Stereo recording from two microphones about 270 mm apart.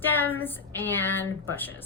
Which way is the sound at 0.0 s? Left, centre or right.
Centre.